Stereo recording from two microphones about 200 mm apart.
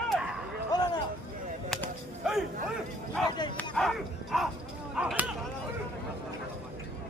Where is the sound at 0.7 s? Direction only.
20° left (ahead or behind).